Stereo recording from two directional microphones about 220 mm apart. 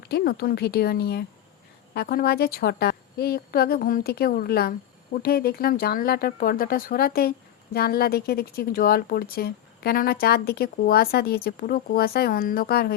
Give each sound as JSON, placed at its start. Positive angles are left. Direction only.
{"t": 0.0, "sound": "speech", "side_deg": 45}